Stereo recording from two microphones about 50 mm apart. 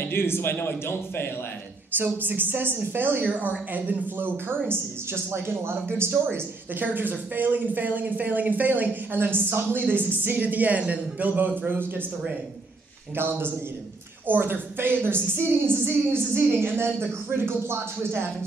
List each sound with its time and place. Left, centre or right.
0.0 s a man's voice: left
2.0 s a woman's voice: right
4.6 s a woman's voice: right
6.2 s speech: right
13.1 s a woman's voice: right